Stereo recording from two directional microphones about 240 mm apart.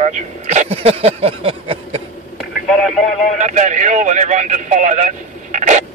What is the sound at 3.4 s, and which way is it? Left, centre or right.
A man's voice, right.